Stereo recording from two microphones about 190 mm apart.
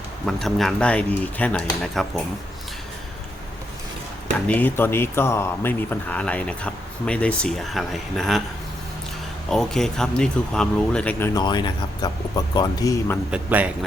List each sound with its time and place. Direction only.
0.3 s speech: centre (ahead or behind)
4.4 s a man's voice: 10° left (ahead or behind)
9.5 s speech: centre (ahead or behind)
11.3 s speech: 25° left (ahead or behind)
13.3 s a man's voice: 5° right (ahead or behind)